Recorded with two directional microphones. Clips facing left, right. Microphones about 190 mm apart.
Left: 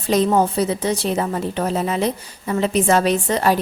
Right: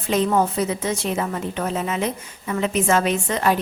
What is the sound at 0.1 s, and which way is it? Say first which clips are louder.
A woman's voice: left 3 dB; 35° left (ahead or behind).